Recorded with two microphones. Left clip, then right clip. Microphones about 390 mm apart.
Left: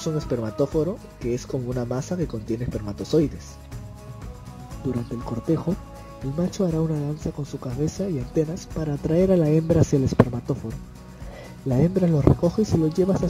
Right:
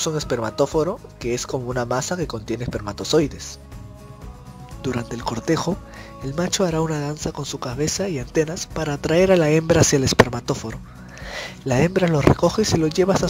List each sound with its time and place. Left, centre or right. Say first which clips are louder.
0.0 s speech: right 4 dB; centre
4.9 s speech: right 5 dB; right